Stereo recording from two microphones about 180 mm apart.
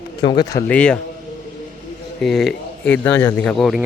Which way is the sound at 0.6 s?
5° left (ahead or behind).